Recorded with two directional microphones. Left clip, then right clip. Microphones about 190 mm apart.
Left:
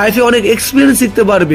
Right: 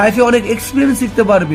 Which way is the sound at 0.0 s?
55° left (ahead or behind).